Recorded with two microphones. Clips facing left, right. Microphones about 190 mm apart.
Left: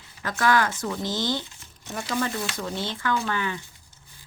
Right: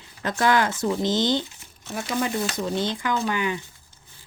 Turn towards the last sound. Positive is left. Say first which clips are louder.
# right 2 dB
turn(degrees=-15)  # may be behind; listen again after turning